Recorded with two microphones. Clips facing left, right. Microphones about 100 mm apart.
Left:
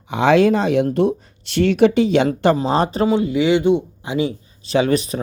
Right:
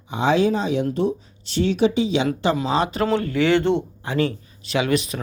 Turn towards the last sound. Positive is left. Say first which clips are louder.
# left 4 dB
turn(degrees=35)  # may be behind; listen again after turning